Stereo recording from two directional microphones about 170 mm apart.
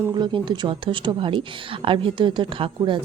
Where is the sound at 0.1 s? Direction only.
25° right (ahead or behind).